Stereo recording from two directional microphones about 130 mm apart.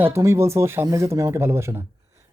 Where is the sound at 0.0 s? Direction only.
20° right (ahead or behind).